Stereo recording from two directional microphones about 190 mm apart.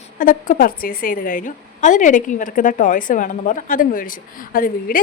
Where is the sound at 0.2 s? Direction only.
45° left (ahead or behind).